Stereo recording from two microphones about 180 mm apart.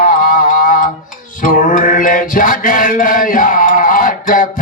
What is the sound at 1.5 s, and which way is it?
Mantra, 45° left (ahead or behind).